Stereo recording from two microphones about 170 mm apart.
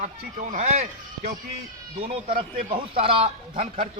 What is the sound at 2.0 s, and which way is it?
A man's voice, 35° right (ahead or behind).